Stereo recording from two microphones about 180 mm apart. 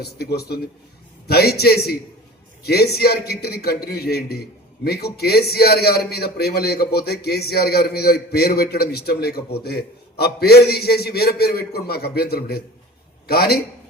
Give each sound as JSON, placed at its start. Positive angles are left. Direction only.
{"t": 0.0, "sound": "a man's voice", "side_deg": 60}